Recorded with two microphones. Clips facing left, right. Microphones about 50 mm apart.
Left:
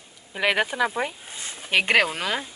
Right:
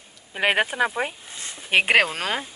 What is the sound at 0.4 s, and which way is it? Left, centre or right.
Speech, right.